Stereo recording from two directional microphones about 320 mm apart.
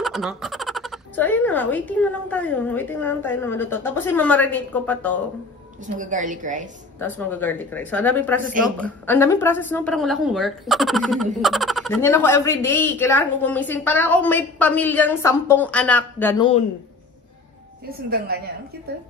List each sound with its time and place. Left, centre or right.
0.0 s speech: centre
5.9 s speech: right
7.0 s speech: centre
8.4 s speech: right
8.7 s speech: centre
18.1 s speech: right